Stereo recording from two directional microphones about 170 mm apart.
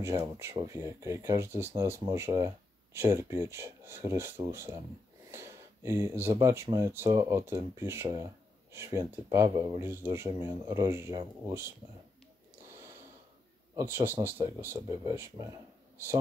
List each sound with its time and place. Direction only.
0.0 s speech: 15° right (ahead or behind)
13.7 s speech: 15° right (ahead or behind)